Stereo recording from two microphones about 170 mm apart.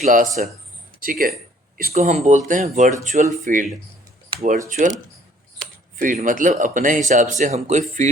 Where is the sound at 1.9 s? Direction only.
40° right (ahead or behind).